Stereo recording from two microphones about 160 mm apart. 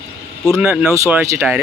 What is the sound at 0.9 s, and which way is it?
Speech, 20° right (ahead or behind).